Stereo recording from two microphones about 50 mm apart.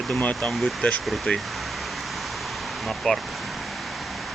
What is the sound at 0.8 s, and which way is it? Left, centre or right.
Speech, left.